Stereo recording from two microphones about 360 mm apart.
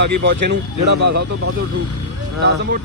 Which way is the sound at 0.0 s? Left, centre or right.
Right.